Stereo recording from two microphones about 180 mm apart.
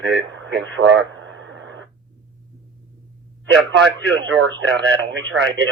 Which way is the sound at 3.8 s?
70° right (ahead or behind).